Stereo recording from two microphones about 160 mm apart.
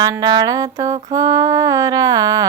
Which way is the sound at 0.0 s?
25° right (ahead or behind).